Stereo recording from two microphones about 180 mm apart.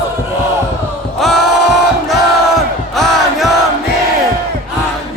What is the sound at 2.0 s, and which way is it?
Battle cry, centre (ahead or behind).